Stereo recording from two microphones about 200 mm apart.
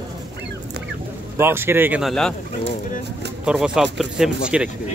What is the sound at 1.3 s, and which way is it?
Speech, 10° right (ahead or behind).